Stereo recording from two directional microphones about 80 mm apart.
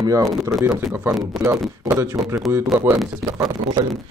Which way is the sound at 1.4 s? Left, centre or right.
Right.